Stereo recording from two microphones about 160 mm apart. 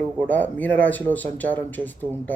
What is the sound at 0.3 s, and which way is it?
Speech, 10° left (ahead or behind).